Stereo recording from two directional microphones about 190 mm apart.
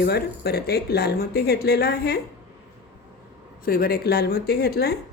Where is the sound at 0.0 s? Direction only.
55° left (ahead or behind).